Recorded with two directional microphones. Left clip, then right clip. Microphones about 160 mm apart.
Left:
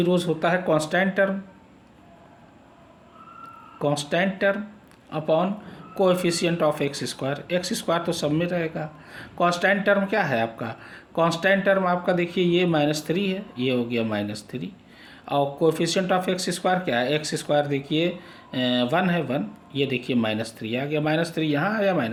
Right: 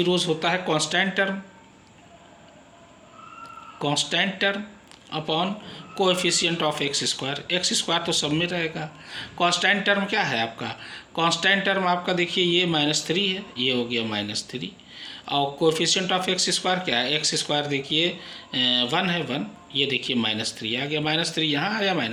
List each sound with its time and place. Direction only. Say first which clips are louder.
0.0 s speech: even; 50° left (ahead or behind)
3.8 s speech: even; 45° left (ahead or behind)